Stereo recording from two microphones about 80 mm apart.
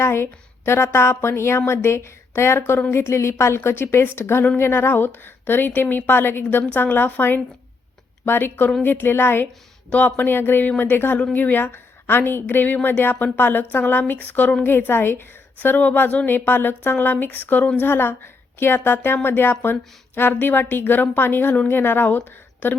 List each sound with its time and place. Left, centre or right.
0.0 s a woman's voice: left